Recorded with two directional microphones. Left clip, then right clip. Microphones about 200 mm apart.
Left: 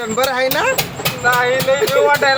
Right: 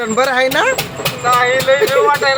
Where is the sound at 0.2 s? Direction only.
10° right (ahead or behind).